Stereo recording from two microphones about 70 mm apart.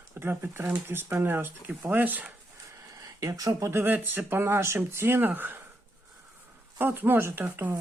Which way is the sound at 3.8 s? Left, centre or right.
Right.